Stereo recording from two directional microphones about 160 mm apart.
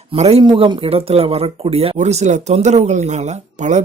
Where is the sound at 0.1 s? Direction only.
40° right (ahead or behind).